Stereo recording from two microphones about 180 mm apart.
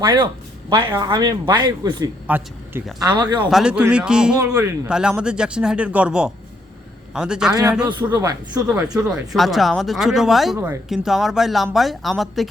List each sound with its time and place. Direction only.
0.0 s speech: 25° right (ahead or behind)
2.2 s speech: 10° right (ahead or behind)
3.4 s speech: 5° right (ahead or behind)
7.9 s speech: 25° right (ahead or behind)
8.6 s speech: 5° right (ahead or behind)